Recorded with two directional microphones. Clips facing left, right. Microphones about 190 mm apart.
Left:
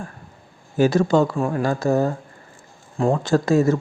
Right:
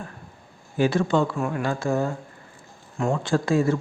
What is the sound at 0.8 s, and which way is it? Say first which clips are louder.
Speech: left 4 dB; 40° left (ahead or behind).